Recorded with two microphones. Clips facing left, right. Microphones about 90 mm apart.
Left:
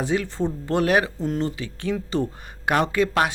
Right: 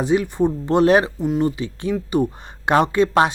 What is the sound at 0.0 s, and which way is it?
Speech, 20° right (ahead or behind).